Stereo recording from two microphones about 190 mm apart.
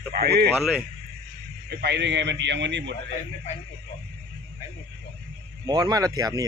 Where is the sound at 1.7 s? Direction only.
60° right (ahead or behind).